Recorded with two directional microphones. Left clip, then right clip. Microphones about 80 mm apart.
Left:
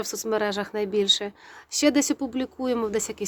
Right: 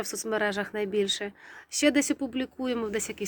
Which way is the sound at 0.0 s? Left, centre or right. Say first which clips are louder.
Left 3 dB; left.